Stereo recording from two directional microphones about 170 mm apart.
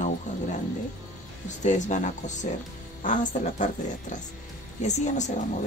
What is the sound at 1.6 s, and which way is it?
A woman's voice, 45° left (ahead or behind).